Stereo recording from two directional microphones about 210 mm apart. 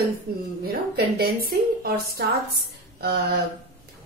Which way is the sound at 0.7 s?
45° right (ahead or behind).